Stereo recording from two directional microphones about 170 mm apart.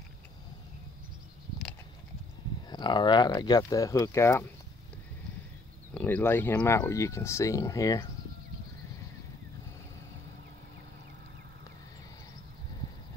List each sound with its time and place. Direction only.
2.7 s speech: 25° left (ahead or behind)
5.9 s speech: 10° left (ahead or behind)